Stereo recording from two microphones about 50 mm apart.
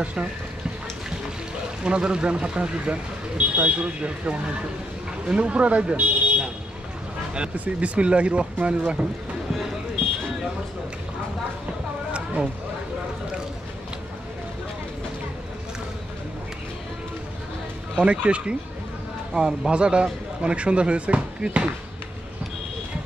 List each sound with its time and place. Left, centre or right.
0.0 s speech: right
1.9 s speech: centre
17.9 s speech: right